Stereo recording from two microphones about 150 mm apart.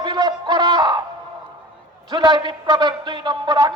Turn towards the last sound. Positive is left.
turn(degrees=-25)  # may be behind; listen again after turning